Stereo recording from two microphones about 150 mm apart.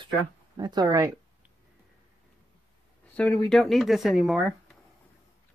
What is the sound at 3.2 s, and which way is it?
Speech, 10° left (ahead or behind).